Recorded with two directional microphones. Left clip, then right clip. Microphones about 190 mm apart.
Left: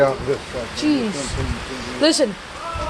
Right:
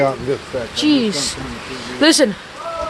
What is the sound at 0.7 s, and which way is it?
A woman's voice, 40° right (ahead or behind).